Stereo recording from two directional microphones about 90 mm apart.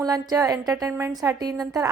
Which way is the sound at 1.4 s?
45° right (ahead or behind).